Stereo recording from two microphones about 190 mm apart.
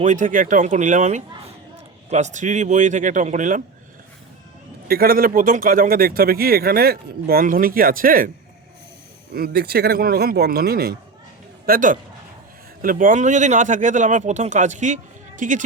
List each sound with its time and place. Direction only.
0.0 s speech: 40° right (ahead or behind)
4.9 s speech: 50° right (ahead or behind)
9.3 s a man's voice: 55° right (ahead or behind)